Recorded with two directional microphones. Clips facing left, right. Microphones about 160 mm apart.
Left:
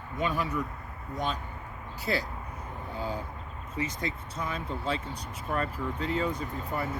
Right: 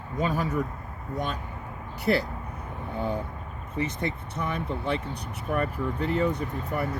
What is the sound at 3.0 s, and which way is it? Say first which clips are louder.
Speech: right 5 dB; 60° right (ahead or behind).